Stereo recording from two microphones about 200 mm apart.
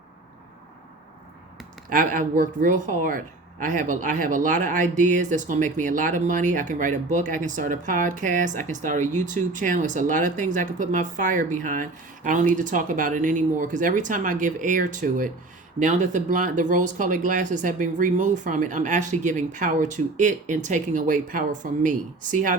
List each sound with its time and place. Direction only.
1.9 s speech: 40° right (ahead or behind)